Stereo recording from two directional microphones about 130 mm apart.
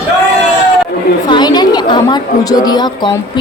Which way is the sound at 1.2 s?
35° left (ahead or behind).